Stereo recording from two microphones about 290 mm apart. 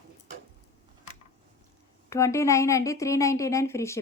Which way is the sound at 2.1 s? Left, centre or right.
Centre.